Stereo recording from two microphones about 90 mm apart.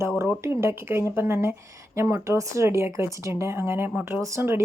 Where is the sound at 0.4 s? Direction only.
30° right (ahead or behind).